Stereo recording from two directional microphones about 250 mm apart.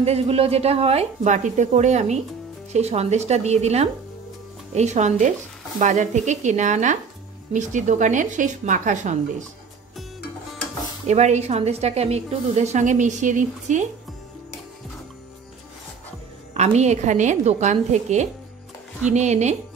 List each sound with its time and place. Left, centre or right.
0.0 s a woman's voice: right
11.1 s a woman's voice: right
16.5 s a woman's voice: right